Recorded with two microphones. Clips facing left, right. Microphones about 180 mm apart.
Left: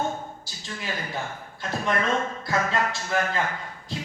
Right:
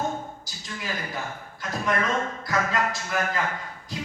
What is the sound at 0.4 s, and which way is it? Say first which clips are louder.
Speech: even; 30° left (ahead or behind).